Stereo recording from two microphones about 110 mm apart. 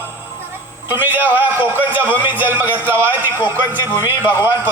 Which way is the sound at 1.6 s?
20° right (ahead or behind).